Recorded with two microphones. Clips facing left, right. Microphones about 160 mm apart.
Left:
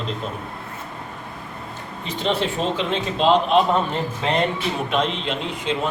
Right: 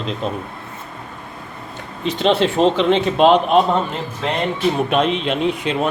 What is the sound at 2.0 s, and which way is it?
A man's voice, 90° right.